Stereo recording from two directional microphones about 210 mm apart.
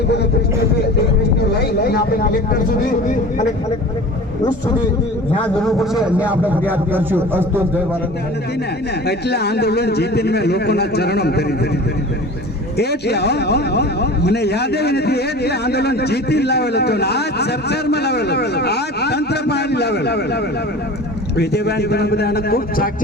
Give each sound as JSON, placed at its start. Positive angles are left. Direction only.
{"t": 1.8, "sound": "a man's voice", "side_deg": 45}
{"t": 5.5, "sound": "a man's voice", "side_deg": 0}
{"t": 9.0, "sound": "a man's voice", "side_deg": 50}
{"t": 12.7, "sound": "a man's voice", "side_deg": 50}